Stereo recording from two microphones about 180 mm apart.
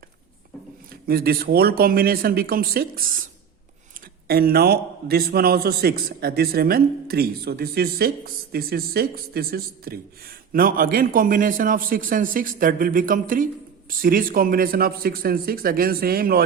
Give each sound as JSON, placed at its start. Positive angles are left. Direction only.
{"t": 1.0, "sound": "a man's voice", "side_deg": -55}
{"t": 4.3, "sound": "a man's voice", "side_deg": -60}